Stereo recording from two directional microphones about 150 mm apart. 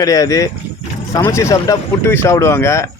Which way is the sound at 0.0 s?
25° left (ahead or behind).